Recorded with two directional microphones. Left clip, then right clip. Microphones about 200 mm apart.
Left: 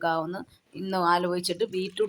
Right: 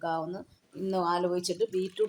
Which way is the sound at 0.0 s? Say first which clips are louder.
Left 5 dB; 20° left (ahead or behind).